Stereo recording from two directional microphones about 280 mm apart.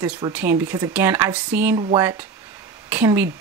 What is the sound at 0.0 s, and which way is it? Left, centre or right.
Speech, centre.